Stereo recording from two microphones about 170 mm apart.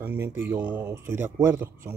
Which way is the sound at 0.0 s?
15° right (ahead or behind).